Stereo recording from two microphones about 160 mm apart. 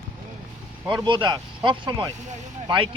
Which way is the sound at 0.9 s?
30° right (ahead or behind).